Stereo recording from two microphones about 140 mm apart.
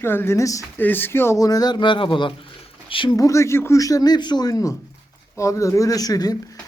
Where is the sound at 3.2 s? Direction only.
20° left (ahead or behind).